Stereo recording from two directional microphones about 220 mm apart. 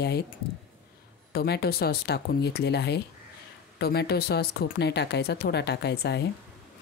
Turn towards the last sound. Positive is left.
turn(degrees=50)  # may be behind; listen again after turning